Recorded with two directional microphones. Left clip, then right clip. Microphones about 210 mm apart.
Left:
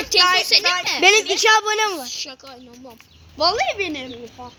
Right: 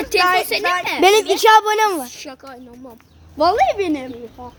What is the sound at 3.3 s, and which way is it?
Speech, 35° right (ahead or behind).